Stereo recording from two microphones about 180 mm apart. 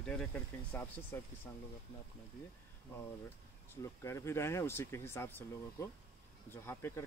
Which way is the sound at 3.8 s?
15° left (ahead or behind).